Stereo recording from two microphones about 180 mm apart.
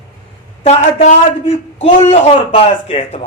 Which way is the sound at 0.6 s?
45° left (ahead or behind).